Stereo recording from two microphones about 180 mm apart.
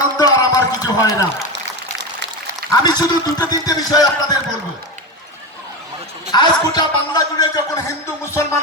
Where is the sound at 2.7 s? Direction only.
20° left (ahead or behind).